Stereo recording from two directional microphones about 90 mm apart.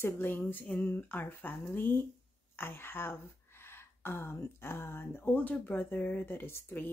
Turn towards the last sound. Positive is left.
turn(degrees=20)  # may be behind; listen again after turning